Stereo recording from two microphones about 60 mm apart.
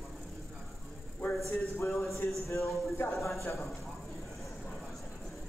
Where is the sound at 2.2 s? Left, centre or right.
Left.